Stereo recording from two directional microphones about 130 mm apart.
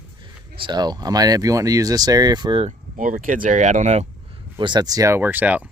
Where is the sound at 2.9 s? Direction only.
85° right; by 4.0 s 60° right (ahead or behind).